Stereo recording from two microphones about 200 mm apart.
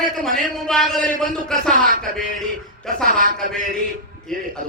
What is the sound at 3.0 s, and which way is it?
Speech, 45° right (ahead or behind).